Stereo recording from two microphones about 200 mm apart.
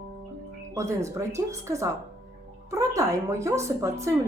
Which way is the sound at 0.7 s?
15° right (ahead or behind).